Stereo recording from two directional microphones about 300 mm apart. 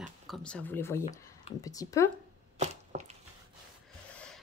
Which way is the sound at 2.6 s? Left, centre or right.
Right.